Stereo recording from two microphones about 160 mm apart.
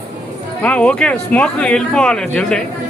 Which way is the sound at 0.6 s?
10° left (ahead or behind).